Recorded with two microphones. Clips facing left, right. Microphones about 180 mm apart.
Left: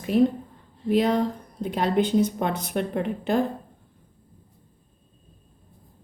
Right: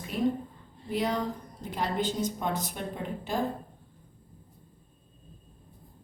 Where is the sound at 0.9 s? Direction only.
70° left (ahead or behind).